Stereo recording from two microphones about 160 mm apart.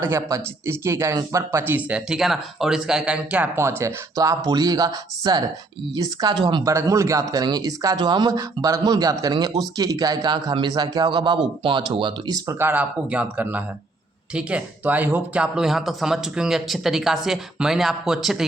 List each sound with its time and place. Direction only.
0.0 s speech: 15° right (ahead or behind)
12.5 s speech: 15° right (ahead or behind)